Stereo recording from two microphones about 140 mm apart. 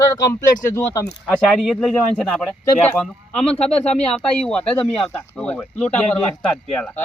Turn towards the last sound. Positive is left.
turn(degrees=5)  # may be behind; listen again after turning